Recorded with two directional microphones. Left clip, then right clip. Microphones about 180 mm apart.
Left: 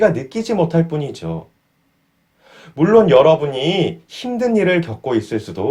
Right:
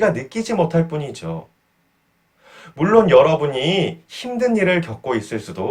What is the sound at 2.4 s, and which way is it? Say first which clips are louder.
Speech: left 4 dB; 40° left (ahead or behind).